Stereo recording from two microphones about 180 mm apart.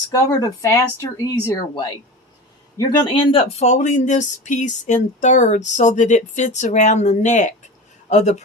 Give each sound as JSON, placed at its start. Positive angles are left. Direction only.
{"t": 0.1, "sound": "speech", "side_deg": 20}